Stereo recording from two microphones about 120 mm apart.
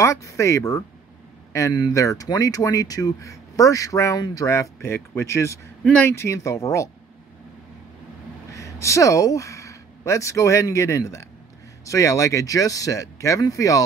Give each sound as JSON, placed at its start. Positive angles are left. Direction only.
{"t": 0.0, "sound": "speech", "side_deg": 25}
{"t": 5.9, "sound": "speech", "side_deg": 10}
{"t": 6.1, "sound": "speech", "side_deg": 25}
{"t": 8.5, "sound": "speech", "side_deg": 25}